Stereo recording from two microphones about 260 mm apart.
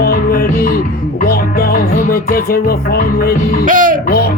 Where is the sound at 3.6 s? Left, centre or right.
Right.